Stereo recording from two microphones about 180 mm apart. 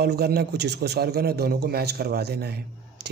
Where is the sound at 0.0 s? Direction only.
60° right (ahead or behind).